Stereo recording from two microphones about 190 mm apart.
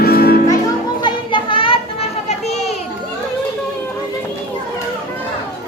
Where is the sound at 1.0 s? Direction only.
25° left (ahead or behind).